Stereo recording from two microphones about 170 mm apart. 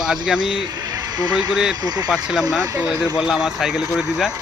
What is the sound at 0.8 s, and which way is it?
Speech, 25° right (ahead or behind).